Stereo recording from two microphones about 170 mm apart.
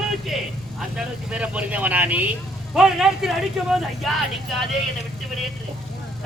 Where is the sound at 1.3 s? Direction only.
5° right (ahead or behind).